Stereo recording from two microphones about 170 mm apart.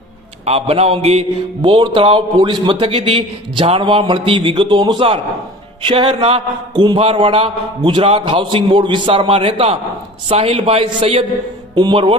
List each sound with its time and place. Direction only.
0.4 s a man's voice: 35° right (ahead or behind)
1.6 s a man's voice: 30° right (ahead or behind)